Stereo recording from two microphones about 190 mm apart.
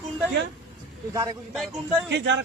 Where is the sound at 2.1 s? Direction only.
65° right (ahead or behind).